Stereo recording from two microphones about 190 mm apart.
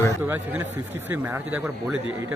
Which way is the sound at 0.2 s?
10° right (ahead or behind).